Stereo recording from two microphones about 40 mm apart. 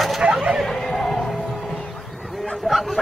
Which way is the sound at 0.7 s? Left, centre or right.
Centre.